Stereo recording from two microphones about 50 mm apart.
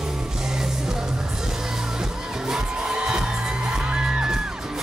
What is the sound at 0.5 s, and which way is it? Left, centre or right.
Music, centre.